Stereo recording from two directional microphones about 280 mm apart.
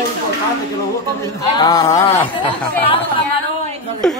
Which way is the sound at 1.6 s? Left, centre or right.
Centre.